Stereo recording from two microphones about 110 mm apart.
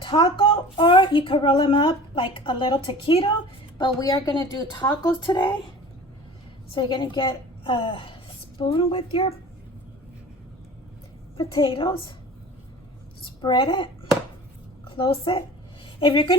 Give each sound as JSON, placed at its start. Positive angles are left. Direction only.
{"t": 0.0, "sound": "a woman's voice", "side_deg": 50}
{"t": 6.7, "sound": "a woman's voice", "side_deg": 45}
{"t": 11.3, "sound": "a woman's voice", "side_deg": 55}
{"t": 13.2, "sound": "a woman's voice", "side_deg": 50}